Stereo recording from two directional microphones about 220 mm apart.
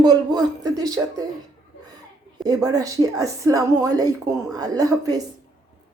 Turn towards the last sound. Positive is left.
turn(degrees=-15)  # may be behind; listen again after turning